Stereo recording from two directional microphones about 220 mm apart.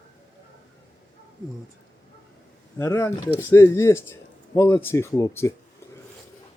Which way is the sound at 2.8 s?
10° left (ahead or behind).